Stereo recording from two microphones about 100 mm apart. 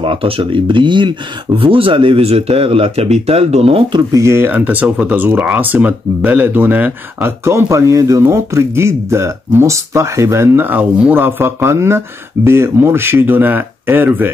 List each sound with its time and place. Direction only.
0.0 s speech: 65° right (ahead or behind)
1.6 s speech: 60° right (ahead or behind); by 3.8 s 80° right
4.1 s speech: 30° right (ahead or behind)
4.6 s speech: 15° right (ahead or behind)